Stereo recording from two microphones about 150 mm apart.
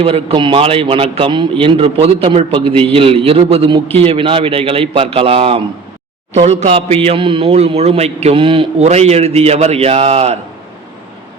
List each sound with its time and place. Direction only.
0.0 s a man's voice: 40° right (ahead or behind)